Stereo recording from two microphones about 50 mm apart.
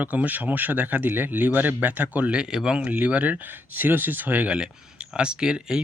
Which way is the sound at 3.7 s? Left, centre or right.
Right.